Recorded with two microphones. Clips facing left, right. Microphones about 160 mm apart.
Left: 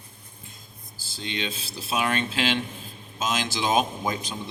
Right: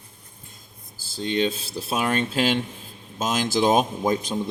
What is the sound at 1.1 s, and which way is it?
A man's voice, 45° right (ahead or behind).